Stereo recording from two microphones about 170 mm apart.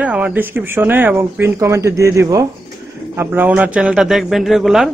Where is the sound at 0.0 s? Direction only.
10° right (ahead or behind).